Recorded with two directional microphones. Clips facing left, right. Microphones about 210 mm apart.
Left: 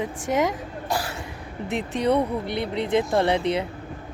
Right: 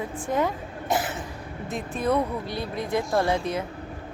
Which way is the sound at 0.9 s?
20° right (ahead or behind).